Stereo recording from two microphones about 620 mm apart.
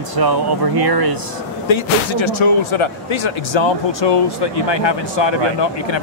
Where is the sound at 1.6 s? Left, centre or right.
Left.